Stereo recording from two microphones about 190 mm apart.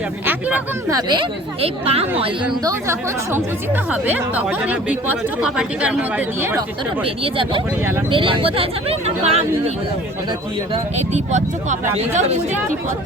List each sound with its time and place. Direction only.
0.3 s speech: 10° right (ahead or behind); by 2.3 s 30° right (ahead or behind)
2.6 s speech: 15° right (ahead or behind)
7.0 s speech: 25° right (ahead or behind)
10.9 s speech: 35° right (ahead or behind)